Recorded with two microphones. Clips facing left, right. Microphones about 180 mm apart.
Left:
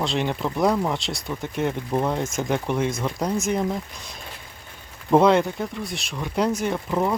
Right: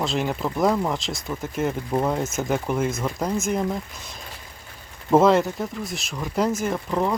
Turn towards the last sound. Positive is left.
turn(degrees=5)  # may be behind; listen again after turning